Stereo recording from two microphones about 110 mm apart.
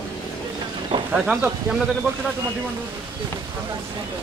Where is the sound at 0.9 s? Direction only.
50° right (ahead or behind).